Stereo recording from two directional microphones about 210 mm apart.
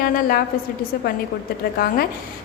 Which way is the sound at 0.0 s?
45° left (ahead or behind).